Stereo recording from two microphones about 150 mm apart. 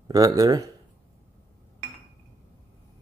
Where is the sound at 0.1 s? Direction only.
25° right (ahead or behind).